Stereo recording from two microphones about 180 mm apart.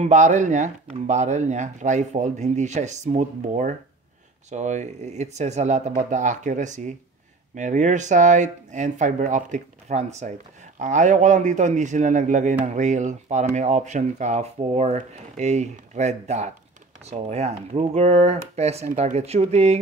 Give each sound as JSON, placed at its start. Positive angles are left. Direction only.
{"t": 0.0, "sound": "speech", "side_deg": -40}